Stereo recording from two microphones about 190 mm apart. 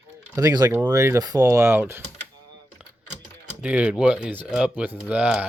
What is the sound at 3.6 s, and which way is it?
Speech, 5° right (ahead or behind).